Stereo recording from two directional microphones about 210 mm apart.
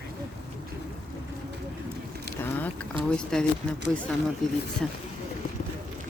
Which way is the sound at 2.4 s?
10° left (ahead or behind).